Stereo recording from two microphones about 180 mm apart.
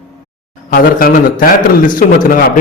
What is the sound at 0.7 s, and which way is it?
A man's voice, 55° left (ahead or behind).